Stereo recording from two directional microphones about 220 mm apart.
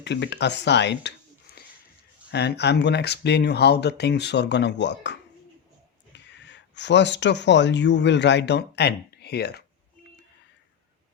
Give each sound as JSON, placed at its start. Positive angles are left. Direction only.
{"t": 0.0, "sound": "speech", "side_deg": 50}
{"t": 1.5, "sound": "a sound", "side_deg": 45}
{"t": 2.3, "sound": "speech", "side_deg": 50}
{"t": 6.1, "sound": "speech", "side_deg": 55}